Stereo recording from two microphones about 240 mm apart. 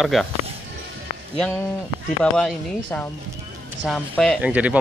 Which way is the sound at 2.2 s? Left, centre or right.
Centre.